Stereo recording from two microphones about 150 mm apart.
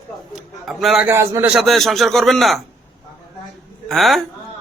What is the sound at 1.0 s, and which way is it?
Speech, 15° right (ahead or behind).